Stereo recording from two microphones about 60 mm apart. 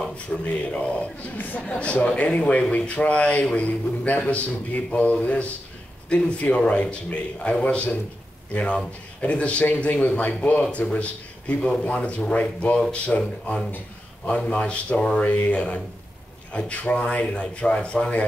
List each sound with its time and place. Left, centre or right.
0.5 s speech: left